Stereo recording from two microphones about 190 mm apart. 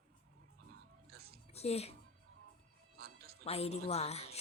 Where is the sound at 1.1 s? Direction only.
55° right (ahead or behind).